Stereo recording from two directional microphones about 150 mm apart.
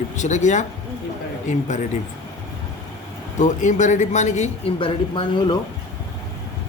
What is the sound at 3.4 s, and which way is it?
A man's voice, 55° left (ahead or behind).